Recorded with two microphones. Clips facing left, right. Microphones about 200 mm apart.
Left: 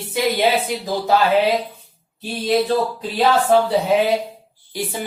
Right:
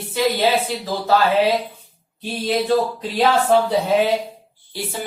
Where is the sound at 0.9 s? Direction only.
15° left (ahead or behind).